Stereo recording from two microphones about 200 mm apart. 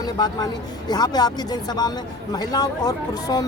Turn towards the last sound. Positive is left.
turn(degrees=20)  # may be behind; listen again after turning